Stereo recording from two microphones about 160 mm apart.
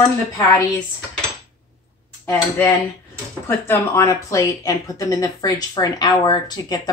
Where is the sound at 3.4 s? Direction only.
15° left (ahead or behind).